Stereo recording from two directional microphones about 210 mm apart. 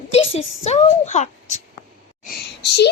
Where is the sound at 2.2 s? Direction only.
50° left (ahead or behind).